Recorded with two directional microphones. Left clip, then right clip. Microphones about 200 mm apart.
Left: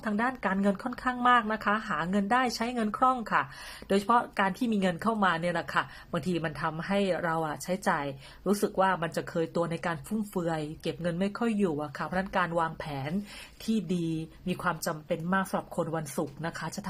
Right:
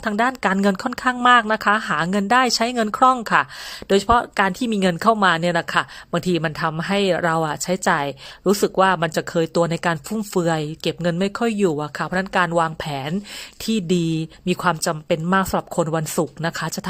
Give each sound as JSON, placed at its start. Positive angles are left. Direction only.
{"t": 0.0, "sound": "speech", "side_deg": -40}